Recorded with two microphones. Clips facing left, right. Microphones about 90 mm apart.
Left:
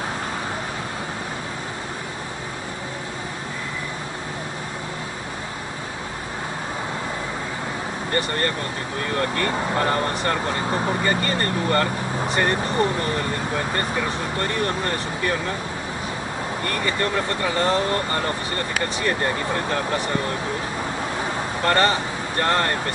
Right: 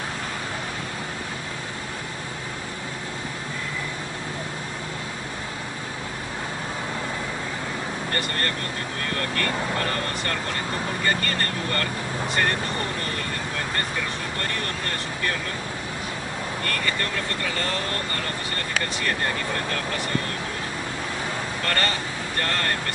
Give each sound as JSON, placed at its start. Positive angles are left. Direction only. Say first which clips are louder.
{"t": 8.1, "sound": "speech", "louder": "left 6 dB", "side_deg": 20}
{"t": 14.4, "sound": "speech", "louder": "left 8 dB", "side_deg": 20}
{"t": 16.6, "sound": "speech", "louder": "left 5 dB", "side_deg": 20}
{"t": 21.6, "sound": "speech", "louder": "left 8 dB", "side_deg": 20}